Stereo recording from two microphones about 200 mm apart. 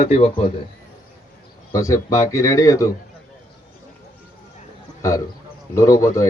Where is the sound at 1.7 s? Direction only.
15° left (ahead or behind).